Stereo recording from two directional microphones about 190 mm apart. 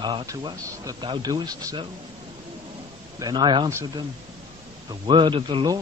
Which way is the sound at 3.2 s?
25° right (ahead or behind).